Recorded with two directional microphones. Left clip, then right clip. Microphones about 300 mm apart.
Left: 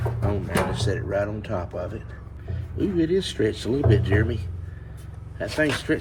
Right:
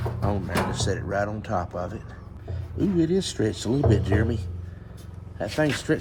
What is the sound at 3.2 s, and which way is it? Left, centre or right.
Speech, centre.